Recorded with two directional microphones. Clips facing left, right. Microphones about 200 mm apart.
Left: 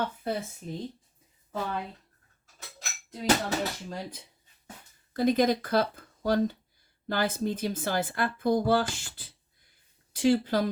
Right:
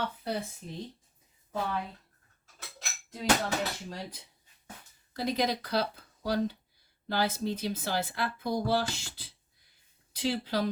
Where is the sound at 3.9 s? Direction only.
50° left (ahead or behind).